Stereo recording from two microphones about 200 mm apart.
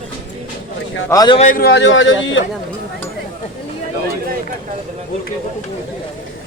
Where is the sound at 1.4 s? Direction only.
40° left (ahead or behind); by 2.4 s 70° left (ahead or behind).